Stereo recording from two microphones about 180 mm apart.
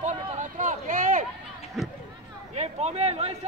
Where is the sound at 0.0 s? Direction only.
40° right (ahead or behind).